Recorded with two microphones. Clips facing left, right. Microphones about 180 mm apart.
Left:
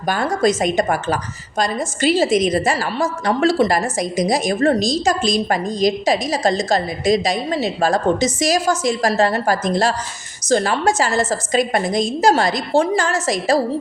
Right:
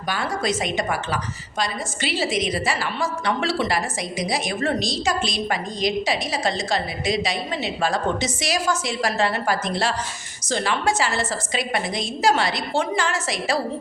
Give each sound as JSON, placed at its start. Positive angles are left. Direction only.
{"t": 0.1, "sound": "a woman's voice", "side_deg": 45}